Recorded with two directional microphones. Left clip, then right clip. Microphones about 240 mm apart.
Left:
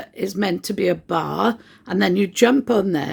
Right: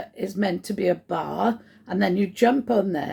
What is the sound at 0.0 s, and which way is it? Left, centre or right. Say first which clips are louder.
Speech: left 3 dB; left.